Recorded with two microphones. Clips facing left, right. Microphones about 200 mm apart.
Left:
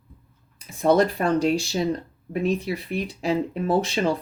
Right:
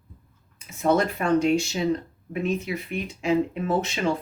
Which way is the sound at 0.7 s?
35° left (ahead or behind).